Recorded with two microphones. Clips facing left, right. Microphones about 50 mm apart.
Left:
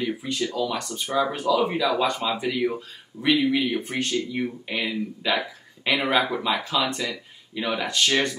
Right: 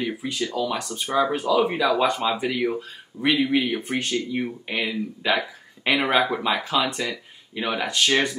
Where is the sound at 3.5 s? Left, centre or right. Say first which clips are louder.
Right 1 dB; centre.